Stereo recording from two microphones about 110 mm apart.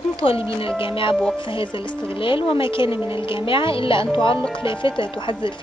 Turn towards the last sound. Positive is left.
turn(degrees=50)  # may be behind; listen again after turning